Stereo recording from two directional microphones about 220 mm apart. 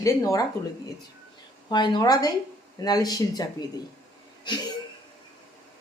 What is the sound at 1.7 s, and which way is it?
A woman's voice, 20° left (ahead or behind).